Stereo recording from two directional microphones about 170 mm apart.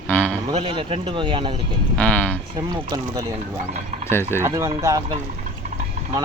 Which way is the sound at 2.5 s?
25° right (ahead or behind).